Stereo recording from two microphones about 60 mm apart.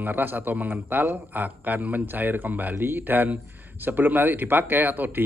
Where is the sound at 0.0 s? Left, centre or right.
Right.